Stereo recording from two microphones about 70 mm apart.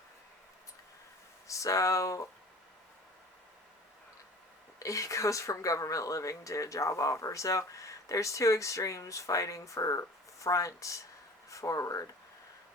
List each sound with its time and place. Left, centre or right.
1.5 s speech: left
4.8 s speech: left